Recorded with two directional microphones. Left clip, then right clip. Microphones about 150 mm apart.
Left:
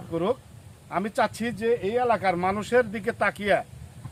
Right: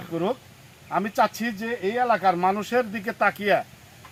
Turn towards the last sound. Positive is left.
turn(degrees=20)  # may be behind; listen again after turning